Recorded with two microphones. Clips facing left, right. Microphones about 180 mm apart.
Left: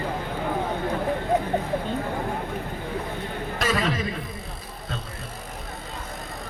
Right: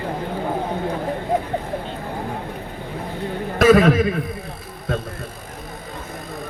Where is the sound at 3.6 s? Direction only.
55° right (ahead or behind).